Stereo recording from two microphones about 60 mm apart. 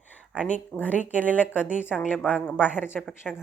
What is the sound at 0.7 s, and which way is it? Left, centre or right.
Speech, left.